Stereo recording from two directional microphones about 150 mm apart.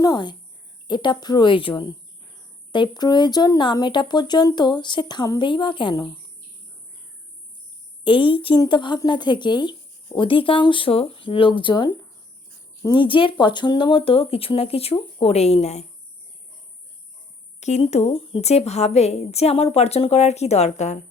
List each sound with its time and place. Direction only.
0.0 s speech: 30° left (ahead or behind)
8.0 s speech: 35° left (ahead or behind)
17.6 s a woman's voice: 45° left (ahead or behind)